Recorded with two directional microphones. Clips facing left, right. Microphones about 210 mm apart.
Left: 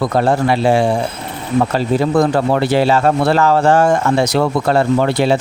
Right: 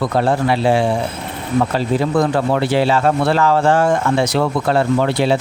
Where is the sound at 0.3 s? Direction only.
45° left (ahead or behind).